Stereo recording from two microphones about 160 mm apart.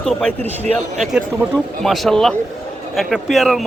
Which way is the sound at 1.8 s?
Centre (ahead or behind).